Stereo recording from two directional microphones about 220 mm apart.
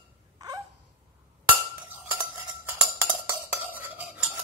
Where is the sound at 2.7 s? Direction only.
10° right (ahead or behind).